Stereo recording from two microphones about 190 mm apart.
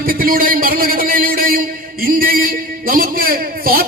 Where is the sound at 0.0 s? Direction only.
50° right (ahead or behind).